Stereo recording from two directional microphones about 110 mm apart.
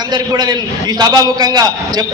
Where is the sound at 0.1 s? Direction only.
40° right (ahead or behind).